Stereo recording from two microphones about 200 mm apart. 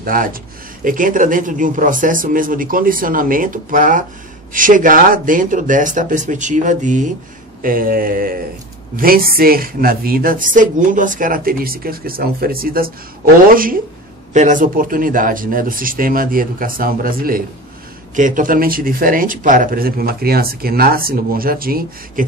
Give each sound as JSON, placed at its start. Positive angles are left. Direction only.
{"t": 0.0, "sound": "speech", "side_deg": -45}